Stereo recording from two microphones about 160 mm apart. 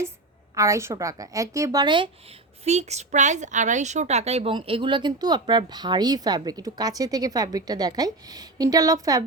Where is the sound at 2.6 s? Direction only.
45° right (ahead or behind).